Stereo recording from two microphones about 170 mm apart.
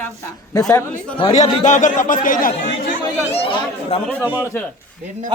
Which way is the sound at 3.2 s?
35° left (ahead or behind).